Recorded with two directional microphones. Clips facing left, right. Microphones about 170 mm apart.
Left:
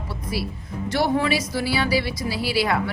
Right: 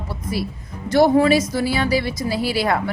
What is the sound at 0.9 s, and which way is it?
Speech, 40° right (ahead or behind).